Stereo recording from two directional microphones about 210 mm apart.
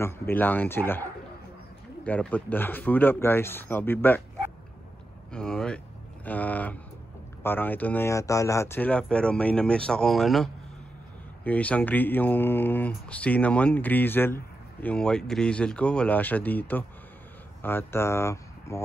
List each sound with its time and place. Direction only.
0.0 s speech: 10° left (ahead or behind)
5.3 s speech: 5° left (ahead or behind)